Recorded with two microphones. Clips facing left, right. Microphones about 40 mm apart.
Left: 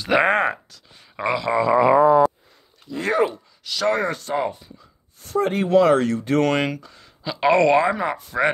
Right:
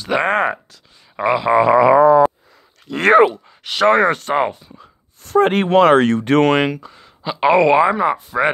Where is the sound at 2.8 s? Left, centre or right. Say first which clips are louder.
Right 10 dB; right.